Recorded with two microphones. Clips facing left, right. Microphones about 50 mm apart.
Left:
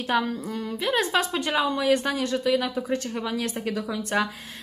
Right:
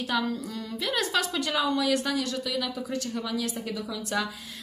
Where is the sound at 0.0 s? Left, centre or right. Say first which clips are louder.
Left 3 dB; left.